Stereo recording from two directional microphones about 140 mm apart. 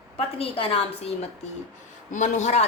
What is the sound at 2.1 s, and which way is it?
Speech, 60° left (ahead or behind).